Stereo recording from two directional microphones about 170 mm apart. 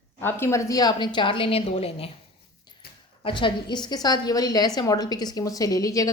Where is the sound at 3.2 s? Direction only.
30° left (ahead or behind).